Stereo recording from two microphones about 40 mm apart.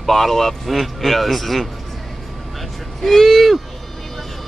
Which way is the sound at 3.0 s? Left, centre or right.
Centre.